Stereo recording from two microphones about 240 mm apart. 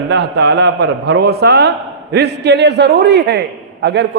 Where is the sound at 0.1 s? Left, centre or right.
Right.